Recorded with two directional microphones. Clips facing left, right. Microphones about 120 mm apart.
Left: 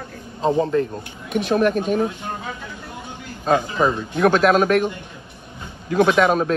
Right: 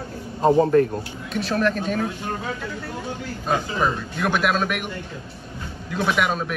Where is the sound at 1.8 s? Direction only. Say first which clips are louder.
Left 4 dB; 15° left (ahead or behind).